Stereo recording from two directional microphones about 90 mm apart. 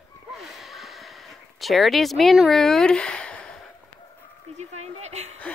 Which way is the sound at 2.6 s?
5° left (ahead or behind).